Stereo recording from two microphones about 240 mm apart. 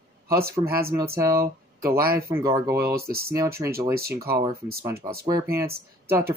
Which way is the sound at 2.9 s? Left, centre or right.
Right.